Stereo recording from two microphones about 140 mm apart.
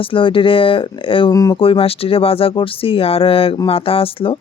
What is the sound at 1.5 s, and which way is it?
Speech, 40° left (ahead or behind).